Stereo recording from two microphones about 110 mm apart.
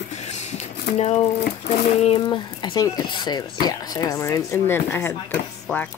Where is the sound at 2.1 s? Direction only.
50° left (ahead or behind).